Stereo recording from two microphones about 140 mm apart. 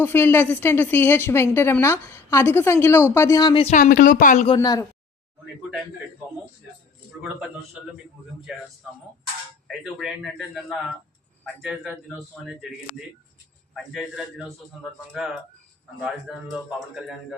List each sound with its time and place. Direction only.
0.0 s a woman's voice: 15° left (ahead or behind)
3.6 s speech: 55° left (ahead or behind)
3.8 s speech: 90° left; by 4.4 s 70° left (ahead or behind)
4.5 s speech: 25° left (ahead or behind)
9.8 s a man's voice: centre (ahead or behind)
13.7 s a man's voice: centre (ahead or behind)